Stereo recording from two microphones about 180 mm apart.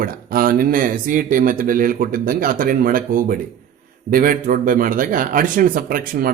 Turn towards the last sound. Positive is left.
turn(degrees=-50)  # may be behind; listen again after turning